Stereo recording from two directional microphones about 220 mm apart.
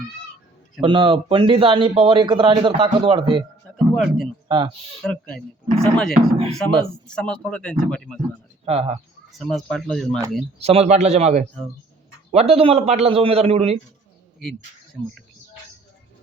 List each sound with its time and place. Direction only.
0.8 s speech: 20° right (ahead or behind)
3.9 s speech: centre (ahead or behind)
4.4 s speech: 20° right (ahead or behind)
5.0 s speech: 5° left (ahead or behind)
8.6 s speech: 30° right (ahead or behind)
9.4 s speech: centre (ahead or behind)
10.6 s speech: 30° right (ahead or behind)